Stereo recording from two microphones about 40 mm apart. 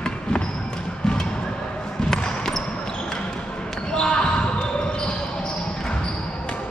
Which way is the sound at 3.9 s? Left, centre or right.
Left.